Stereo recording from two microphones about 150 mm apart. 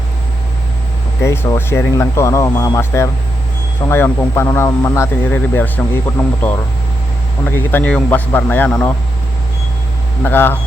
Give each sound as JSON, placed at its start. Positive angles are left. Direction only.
{"t": 1.2, "sound": "speech", "side_deg": 15}
{"t": 10.2, "sound": "speech", "side_deg": 15}